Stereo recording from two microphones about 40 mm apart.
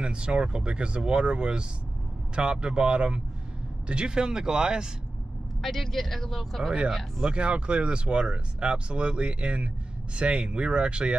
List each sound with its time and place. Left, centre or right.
0.0 s speech: right
5.6 s speech: centre
7.2 s speech: right